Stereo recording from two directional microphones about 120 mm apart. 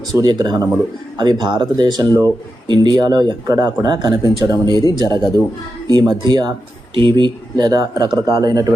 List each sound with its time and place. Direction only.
0.1 s speech: 35° right (ahead or behind)